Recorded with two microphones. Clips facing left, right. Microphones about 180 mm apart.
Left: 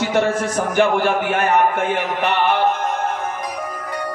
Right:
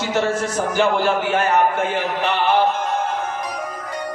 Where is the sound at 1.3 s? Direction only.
55° left (ahead or behind).